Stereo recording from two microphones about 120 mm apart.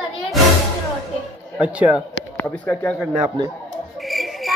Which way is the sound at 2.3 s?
20° left (ahead or behind).